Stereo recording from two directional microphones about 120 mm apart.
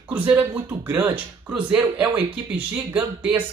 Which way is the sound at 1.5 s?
10° right (ahead or behind).